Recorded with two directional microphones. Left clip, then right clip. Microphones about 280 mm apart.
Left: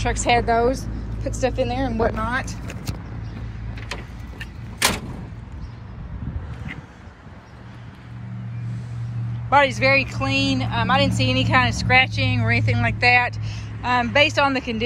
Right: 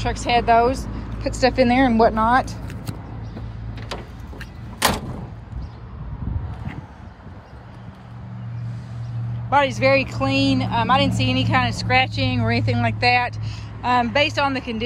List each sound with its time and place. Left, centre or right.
0.0 s speech: centre
1.7 s speech: right
2.1 s speech: centre
3.9 s vehicle: right
9.5 s speech: centre